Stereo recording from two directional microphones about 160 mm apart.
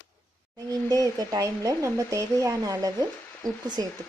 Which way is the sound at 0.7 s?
20° right (ahead or behind).